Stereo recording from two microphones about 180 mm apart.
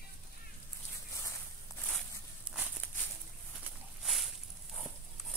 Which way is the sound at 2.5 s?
Centre (ahead or behind).